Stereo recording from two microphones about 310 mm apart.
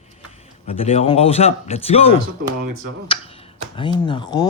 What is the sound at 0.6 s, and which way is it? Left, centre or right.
Speech, centre.